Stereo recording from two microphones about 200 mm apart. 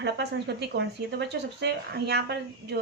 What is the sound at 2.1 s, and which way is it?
Speech, 55° right (ahead or behind).